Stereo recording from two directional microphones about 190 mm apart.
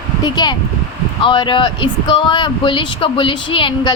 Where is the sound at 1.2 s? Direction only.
25° left (ahead or behind).